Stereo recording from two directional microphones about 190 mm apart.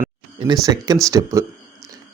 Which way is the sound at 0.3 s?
20° right (ahead or behind).